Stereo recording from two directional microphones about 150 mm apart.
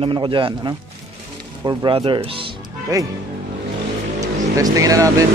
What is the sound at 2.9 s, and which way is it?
Speech, 25° right (ahead or behind).